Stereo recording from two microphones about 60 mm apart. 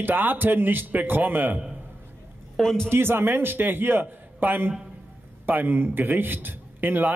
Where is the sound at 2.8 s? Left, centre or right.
Right.